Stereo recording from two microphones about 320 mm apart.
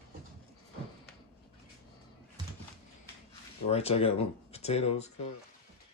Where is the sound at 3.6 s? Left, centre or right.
Centre.